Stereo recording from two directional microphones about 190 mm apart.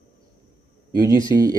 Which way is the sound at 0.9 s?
20° right (ahead or behind).